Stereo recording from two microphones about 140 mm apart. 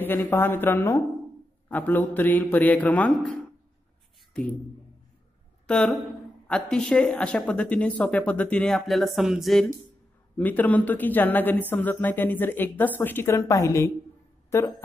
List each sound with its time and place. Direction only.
0.0 s speech: 15° left (ahead or behind)
4.3 s speech: 10° left (ahead or behind)
5.7 s speech: 5° left (ahead or behind)
10.3 s speech: 10° left (ahead or behind)